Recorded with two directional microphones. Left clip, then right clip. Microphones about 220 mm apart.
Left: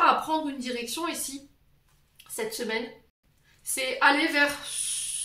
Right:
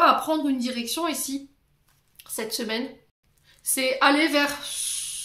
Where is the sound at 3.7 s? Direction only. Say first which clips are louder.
Right 2 dB; 45° right (ahead or behind).